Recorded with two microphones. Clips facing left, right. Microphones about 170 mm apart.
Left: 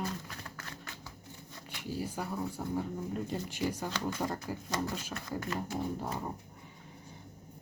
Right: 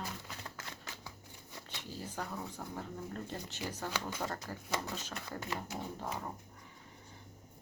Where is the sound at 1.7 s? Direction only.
10° left (ahead or behind).